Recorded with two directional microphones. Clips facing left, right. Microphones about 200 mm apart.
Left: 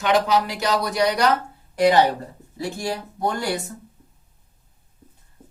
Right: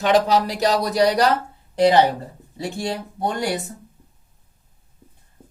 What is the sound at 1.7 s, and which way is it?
A woman's voice, 25° right (ahead or behind).